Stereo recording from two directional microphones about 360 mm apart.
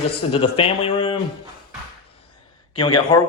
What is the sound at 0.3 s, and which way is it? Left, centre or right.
Speech, centre.